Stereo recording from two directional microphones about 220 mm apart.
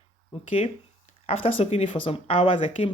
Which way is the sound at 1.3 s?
25° left (ahead or behind).